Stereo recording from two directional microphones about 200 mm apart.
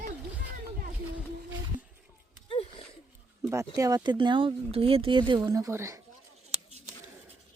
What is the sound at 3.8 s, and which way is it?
Speech, 20° right (ahead or behind).